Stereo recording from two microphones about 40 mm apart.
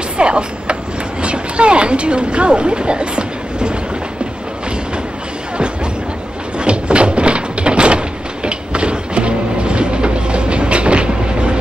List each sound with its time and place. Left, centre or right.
0.2 s vehicle: right
1.2 s a sound: right
6.6 s door: right